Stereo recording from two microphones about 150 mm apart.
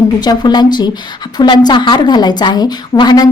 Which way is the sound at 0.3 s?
30° left (ahead or behind).